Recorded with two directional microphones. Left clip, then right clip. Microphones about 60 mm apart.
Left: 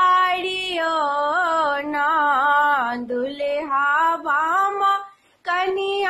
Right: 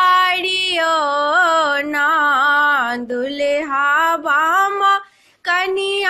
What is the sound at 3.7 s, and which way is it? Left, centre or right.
Female singing, right.